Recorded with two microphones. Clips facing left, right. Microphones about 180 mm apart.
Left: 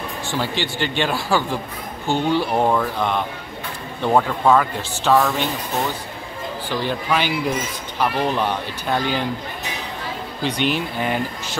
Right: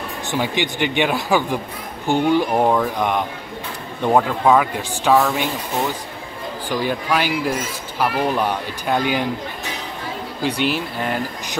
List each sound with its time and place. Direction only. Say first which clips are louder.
0.3 s speech: right 3 dB; 15° right (ahead or behind)
6.7 s speech: right 2 dB; 10° right (ahead or behind)
10.4 s speech: right 1 dB; 5° right (ahead or behind)